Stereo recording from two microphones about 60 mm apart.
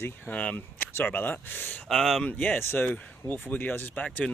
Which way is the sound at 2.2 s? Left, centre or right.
Left.